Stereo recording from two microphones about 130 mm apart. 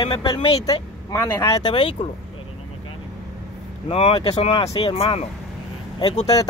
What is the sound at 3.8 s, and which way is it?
Speech, 50° left (ahead or behind).